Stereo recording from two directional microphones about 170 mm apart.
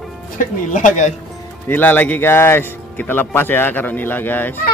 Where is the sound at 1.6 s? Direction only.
10° left (ahead or behind).